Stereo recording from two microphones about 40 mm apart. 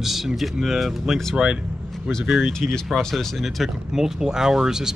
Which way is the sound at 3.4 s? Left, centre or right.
Centre.